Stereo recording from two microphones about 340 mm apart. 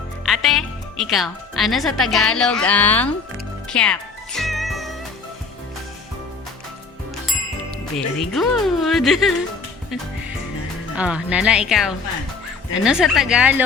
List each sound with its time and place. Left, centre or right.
0.3 s speech: centre
3.7 s music: centre
7.9 s speech: centre
10.9 s speech: centre